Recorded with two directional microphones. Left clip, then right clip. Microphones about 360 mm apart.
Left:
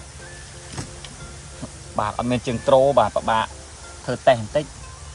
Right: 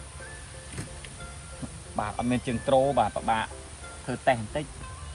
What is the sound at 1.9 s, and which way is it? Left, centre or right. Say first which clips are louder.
Speech: left 6 dB; left.